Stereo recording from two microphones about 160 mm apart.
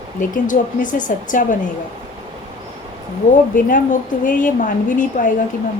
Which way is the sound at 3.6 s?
55° left (ahead or behind).